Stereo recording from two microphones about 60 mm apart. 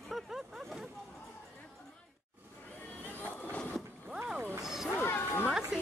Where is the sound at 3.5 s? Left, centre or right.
Centre.